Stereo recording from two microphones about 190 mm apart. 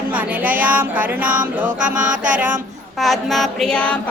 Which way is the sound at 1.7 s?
40° right (ahead or behind).